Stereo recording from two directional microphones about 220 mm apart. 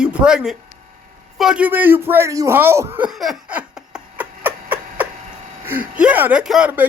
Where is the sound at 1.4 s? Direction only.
5° right (ahead or behind).